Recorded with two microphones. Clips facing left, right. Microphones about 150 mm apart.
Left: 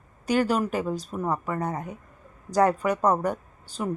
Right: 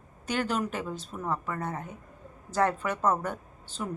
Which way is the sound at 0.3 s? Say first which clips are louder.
Left 6 dB; 10° left (ahead or behind).